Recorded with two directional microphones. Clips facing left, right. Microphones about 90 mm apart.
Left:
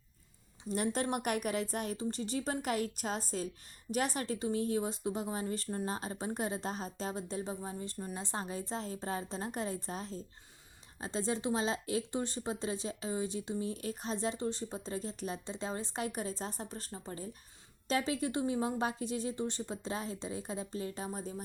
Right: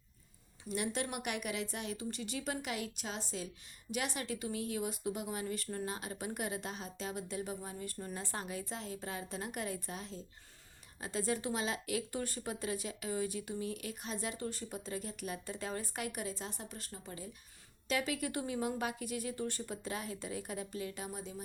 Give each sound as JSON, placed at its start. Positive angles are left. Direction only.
{"t": 0.7, "sound": "a woman's voice", "side_deg": 40}